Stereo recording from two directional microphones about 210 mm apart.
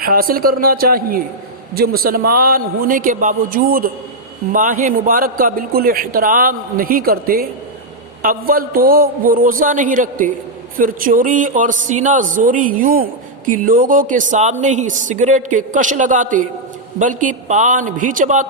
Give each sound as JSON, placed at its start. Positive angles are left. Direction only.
{"t": 0.0, "sound": "a man's voice", "side_deg": -45}